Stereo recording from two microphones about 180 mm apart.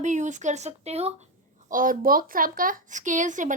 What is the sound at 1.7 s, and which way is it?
A woman's voice, 50° right (ahead or behind).